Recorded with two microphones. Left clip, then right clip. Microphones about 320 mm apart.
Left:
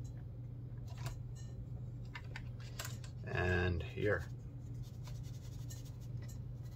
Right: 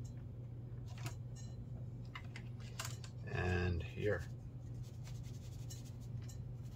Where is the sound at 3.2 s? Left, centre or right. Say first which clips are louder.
Left 4 dB; centre.